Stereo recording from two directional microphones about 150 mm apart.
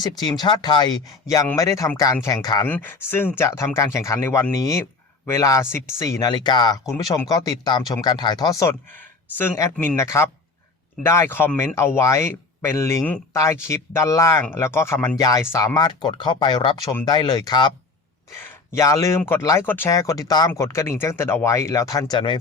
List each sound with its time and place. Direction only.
0.2 s speech: 25° left (ahead or behind)
2.6 s speech: 10° left (ahead or behind)
10.0 s speech: 20° left (ahead or behind)
18.4 s speech: 20° left (ahead or behind)